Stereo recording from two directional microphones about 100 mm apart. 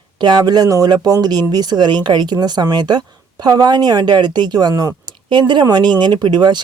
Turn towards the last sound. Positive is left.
turn(degrees=-45)  # may be behind; listen again after turning